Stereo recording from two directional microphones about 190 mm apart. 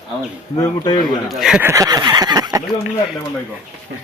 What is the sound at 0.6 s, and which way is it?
Speech, 20° left (ahead or behind).